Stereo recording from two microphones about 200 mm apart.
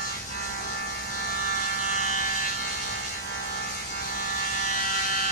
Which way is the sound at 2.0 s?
40° left (ahead or behind).